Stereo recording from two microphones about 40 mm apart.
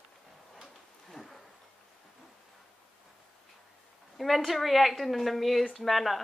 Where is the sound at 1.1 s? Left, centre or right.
Centre.